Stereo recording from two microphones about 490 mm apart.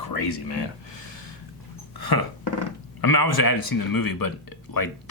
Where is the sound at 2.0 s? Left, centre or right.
Left.